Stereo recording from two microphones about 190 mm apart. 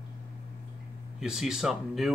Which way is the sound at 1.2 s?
5° right (ahead or behind).